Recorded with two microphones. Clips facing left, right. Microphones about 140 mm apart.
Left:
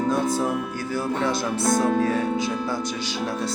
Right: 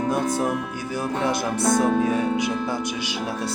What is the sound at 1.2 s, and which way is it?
Speech, 15° right (ahead or behind).